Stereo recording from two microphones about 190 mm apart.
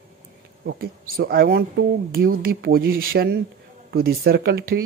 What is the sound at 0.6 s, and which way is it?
Speech, 55° right (ahead or behind).